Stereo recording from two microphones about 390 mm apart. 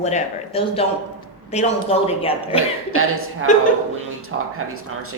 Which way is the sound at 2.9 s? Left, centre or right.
Right.